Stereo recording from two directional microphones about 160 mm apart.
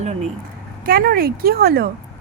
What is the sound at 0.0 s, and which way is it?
Speech, 45° right (ahead or behind).